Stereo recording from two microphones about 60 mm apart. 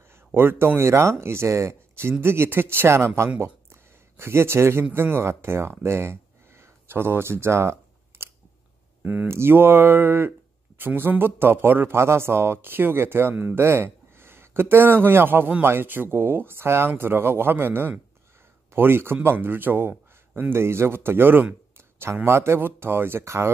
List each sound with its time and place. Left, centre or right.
0.3 s speech: right
3.3 s a sound: right
4.9 s speech: right
9.0 s speech: right
9.3 s speech: right
13.6 s speech: right